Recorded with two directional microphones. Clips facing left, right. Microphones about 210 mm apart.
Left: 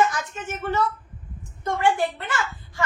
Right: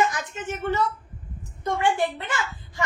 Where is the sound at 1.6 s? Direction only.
15° right (ahead or behind).